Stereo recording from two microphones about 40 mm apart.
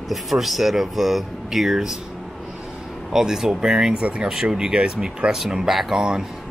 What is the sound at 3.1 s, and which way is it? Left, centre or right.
Speech, centre.